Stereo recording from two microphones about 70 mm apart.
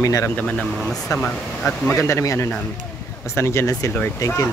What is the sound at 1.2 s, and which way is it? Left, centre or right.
Speech, centre.